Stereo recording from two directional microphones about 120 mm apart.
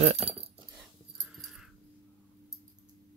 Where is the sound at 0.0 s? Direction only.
60° right (ahead or behind).